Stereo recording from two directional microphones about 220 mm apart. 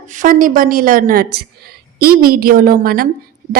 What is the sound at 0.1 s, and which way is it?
A woman's voice, 35° right (ahead or behind).